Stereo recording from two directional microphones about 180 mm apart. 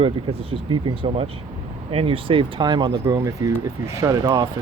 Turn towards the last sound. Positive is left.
turn(degrees=-20)  # may be behind; listen again after turning